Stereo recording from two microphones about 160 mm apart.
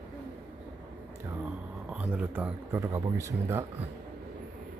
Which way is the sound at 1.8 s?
10° right (ahead or behind).